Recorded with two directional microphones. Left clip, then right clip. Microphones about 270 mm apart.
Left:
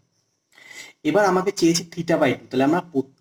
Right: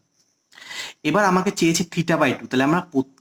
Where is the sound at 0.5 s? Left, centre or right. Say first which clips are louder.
Right 8 dB; centre.